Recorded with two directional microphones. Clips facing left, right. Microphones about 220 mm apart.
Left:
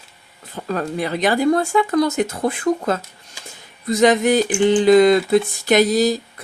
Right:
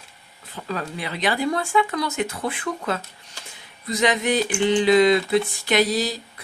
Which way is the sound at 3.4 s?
10° left (ahead or behind).